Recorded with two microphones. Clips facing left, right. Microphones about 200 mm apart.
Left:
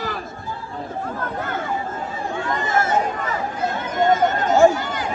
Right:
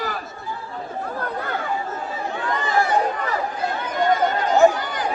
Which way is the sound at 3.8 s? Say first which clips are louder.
Left 2 dB; 25° left (ahead or behind).